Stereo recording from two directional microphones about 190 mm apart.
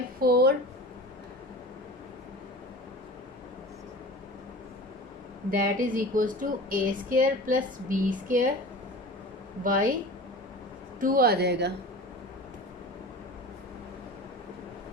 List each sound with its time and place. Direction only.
0.2 s a sound: 55° right (ahead or behind)
5.5 s speech: 45° right (ahead or behind)
9.6 s speech: 45° right (ahead or behind)
11.0 s speech: 50° right (ahead or behind)